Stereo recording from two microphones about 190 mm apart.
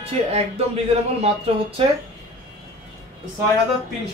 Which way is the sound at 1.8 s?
25° right (ahead or behind).